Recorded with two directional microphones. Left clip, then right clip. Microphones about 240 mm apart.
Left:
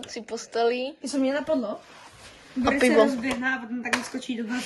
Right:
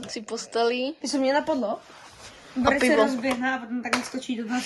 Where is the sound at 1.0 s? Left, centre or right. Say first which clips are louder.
Right 6 dB; right.